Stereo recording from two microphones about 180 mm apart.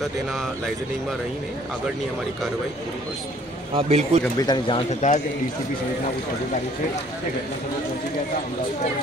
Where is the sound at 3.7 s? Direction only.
35° right (ahead or behind).